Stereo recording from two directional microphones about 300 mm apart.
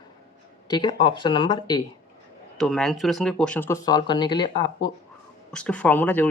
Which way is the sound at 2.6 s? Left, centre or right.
Centre.